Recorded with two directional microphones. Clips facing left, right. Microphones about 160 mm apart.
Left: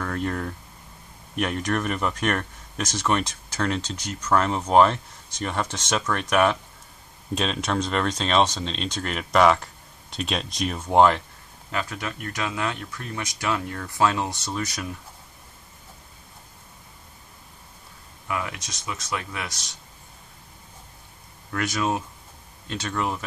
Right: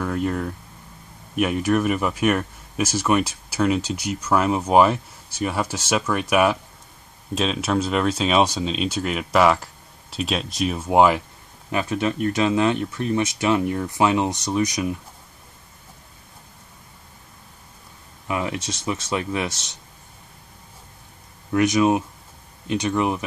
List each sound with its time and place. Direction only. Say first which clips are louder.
0.0 s speech: right 4 dB; 5° right (ahead or behind)
11.7 s speech: right 7 dB; 20° right (ahead or behind)
18.3 s speech: right 5 dB; 25° right (ahead or behind)
21.5 s speech: right 8 dB; 20° right (ahead or behind)